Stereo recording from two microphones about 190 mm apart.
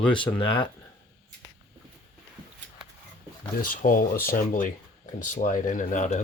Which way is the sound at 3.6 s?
45° left (ahead or behind).